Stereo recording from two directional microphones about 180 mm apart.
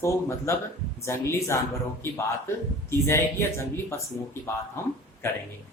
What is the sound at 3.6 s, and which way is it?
Speech, 15° left (ahead or behind).